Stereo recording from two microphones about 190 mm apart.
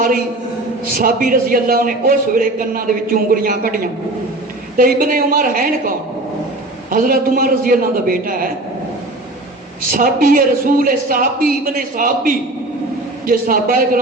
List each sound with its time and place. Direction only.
0.9 s a man's voice: 50° right (ahead or behind)
4.8 s a man's voice: 50° right (ahead or behind)
6.9 s a man's voice: 45° right (ahead or behind)
9.9 s a man's voice: 50° right (ahead or behind)